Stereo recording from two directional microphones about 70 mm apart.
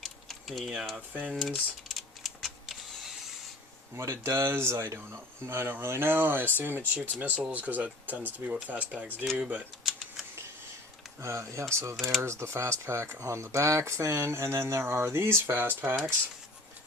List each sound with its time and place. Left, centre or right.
0.0 s a sound: centre
1.3 s typing: centre
3.9 s speech: right; by 9.6 s centre
11.2 s speech: right
11.9 s speech: centre
12.2 s speech: right